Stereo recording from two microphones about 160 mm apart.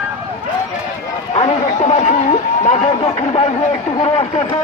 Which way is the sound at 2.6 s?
45° left (ahead or behind).